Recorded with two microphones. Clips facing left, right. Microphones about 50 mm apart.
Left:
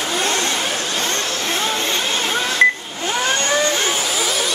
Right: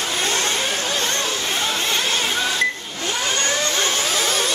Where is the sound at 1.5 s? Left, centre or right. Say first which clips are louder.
Left 3 dB; centre.